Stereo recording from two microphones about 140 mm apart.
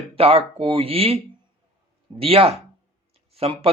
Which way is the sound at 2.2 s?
45° right (ahead or behind).